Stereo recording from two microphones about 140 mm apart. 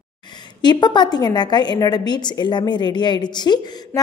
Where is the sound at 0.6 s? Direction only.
30° left (ahead or behind).